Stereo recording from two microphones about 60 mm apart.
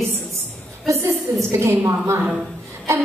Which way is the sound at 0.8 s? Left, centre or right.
Right.